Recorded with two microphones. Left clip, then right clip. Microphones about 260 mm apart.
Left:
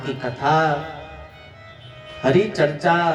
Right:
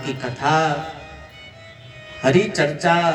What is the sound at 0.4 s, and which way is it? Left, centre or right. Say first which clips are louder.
Speech: even; right.